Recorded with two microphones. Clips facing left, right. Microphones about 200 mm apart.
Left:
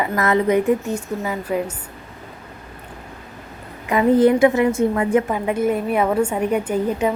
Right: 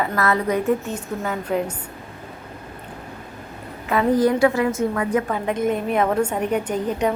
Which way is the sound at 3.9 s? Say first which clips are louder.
Left 4 dB; 20° left (ahead or behind).